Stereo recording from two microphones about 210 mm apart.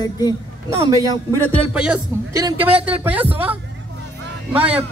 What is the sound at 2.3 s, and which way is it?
Speech, 20° right (ahead or behind).